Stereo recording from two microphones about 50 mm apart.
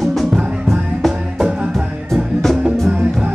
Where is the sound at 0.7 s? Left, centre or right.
Centre.